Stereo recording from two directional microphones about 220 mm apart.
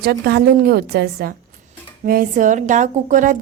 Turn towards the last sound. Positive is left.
turn(degrees=-35)  # may be behind; listen again after turning